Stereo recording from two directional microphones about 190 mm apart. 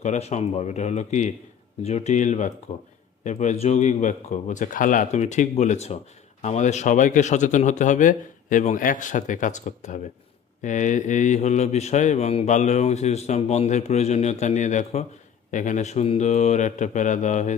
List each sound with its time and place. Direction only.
0.0 s a man's voice: 40° left (ahead or behind)